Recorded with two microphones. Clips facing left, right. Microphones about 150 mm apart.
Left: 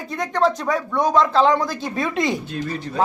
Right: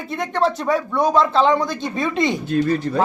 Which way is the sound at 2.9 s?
55° right (ahead or behind).